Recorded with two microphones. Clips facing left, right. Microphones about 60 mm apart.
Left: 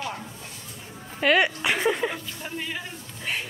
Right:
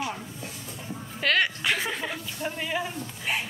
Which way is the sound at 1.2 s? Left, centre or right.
Centre.